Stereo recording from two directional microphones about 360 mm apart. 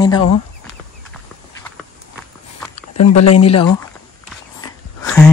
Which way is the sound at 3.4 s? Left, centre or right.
Centre.